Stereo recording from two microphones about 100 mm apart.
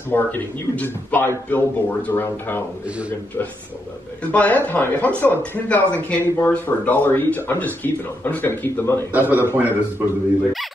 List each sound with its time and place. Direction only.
0.1 s speech: 20° left (ahead or behind)
4.2 s speech: 15° left (ahead or behind)
9.1 s a man's voice: 15° right (ahead or behind)